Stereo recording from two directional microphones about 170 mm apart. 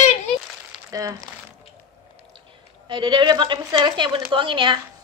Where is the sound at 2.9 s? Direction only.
25° right (ahead or behind).